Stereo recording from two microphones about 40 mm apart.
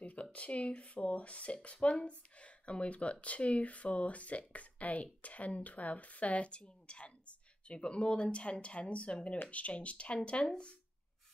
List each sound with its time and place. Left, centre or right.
0.0 s speech: left